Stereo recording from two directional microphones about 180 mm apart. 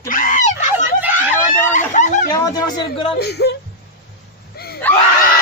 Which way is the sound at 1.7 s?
45° left (ahead or behind).